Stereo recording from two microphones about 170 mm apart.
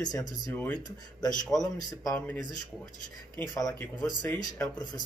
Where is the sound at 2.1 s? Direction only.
10° left (ahead or behind).